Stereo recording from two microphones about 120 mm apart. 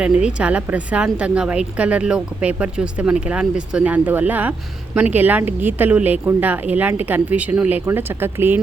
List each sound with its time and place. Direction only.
0.0 s a woman's voice: 10° right (ahead or behind)